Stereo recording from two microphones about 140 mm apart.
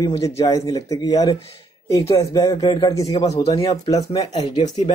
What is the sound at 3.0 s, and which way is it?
Speech, 45° left (ahead or behind).